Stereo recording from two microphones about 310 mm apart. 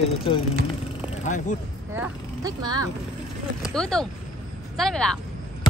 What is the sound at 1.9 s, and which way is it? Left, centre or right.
Speech, centre.